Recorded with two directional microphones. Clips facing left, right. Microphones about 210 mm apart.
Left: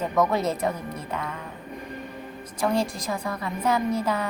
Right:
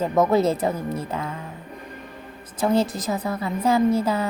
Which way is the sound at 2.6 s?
5° right (ahead or behind).